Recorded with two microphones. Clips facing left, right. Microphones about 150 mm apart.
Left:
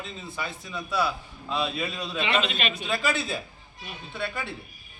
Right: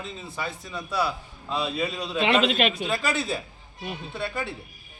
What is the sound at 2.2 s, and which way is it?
Speech, 90° right.